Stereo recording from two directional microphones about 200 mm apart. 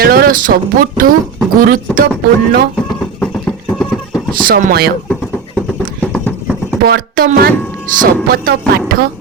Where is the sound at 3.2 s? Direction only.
10° left (ahead or behind).